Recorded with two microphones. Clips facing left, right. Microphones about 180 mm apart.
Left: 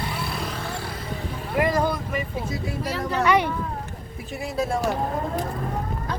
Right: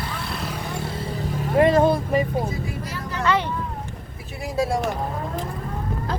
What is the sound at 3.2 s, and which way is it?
Speech, 15° left (ahead or behind).